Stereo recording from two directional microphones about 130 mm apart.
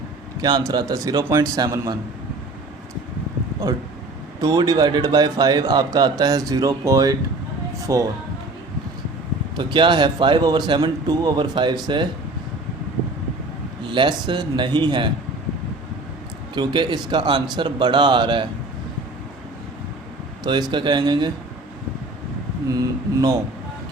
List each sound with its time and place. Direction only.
0.4 s a man's voice: 30° right (ahead or behind)
4.4 s a man's voice: 30° right (ahead or behind)
9.6 s speech: 40° right (ahead or behind)
13.9 s speech: 40° right (ahead or behind)
16.6 s speech: 35° right (ahead or behind)
20.4 s speech: 35° right (ahead or behind)
22.7 s a man's voice: 30° right (ahead or behind)